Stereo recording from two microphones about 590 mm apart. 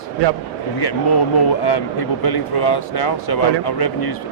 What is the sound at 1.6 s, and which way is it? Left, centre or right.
Speech, left.